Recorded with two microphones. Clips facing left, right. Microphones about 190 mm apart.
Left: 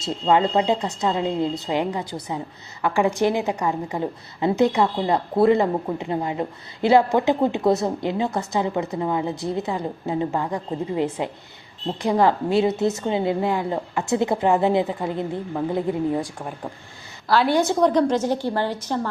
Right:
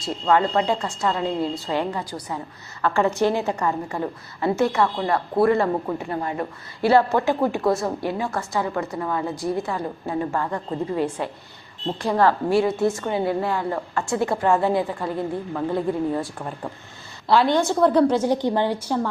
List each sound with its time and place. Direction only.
0.0 s a woman's voice: 20° left (ahead or behind)
17.6 s a woman's voice: 20° left (ahead or behind)
17.8 s a woman's voice: 10° right (ahead or behind)